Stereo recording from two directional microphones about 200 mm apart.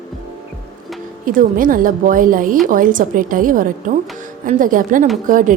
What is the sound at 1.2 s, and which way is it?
A woman's voice, 45° right (ahead or behind).